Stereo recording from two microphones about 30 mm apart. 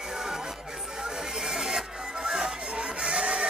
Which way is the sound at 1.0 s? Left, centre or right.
Right.